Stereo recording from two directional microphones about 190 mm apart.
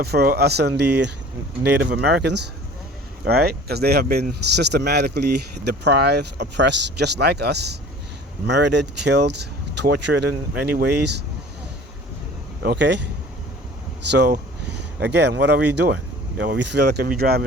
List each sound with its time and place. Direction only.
0.0 s speech: 55° right (ahead or behind)
12.6 s speech: 65° right (ahead or behind)
14.1 s speech: 60° right (ahead or behind)